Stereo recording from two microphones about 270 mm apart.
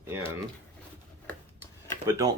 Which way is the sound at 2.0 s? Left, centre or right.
Centre.